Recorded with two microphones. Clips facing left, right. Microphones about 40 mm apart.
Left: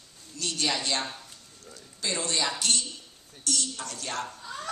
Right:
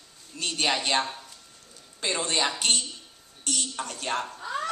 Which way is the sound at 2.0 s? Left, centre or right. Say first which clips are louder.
Right 3 dB; right.